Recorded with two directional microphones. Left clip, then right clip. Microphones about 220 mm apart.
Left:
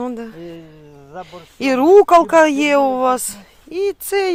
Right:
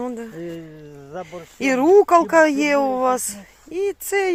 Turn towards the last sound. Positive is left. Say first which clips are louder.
# left 3 dB
turn(degrees=20)  # may be behind; listen again after turning